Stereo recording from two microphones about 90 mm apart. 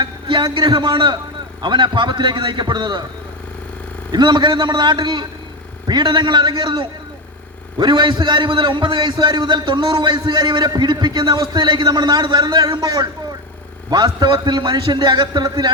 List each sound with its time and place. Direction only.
0.0 s a man's voice: 60° right (ahead or behind)
4.1 s a man's voice: 55° right (ahead or behind)